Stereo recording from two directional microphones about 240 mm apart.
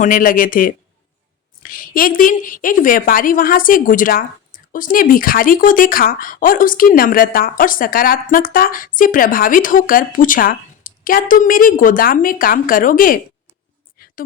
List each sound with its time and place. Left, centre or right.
0.0 s a woman's voice: left